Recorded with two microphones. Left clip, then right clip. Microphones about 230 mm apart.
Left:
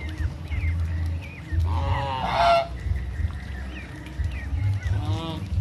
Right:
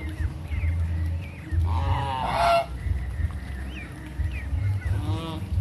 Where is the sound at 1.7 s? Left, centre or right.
Centre.